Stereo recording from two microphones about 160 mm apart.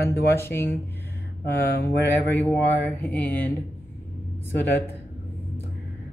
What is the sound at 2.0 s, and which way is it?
Speech, 10° left (ahead or behind).